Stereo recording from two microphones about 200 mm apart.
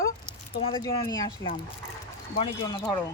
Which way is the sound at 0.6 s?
25° left (ahead or behind).